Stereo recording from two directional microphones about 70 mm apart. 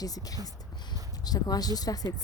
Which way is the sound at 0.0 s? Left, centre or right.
Left.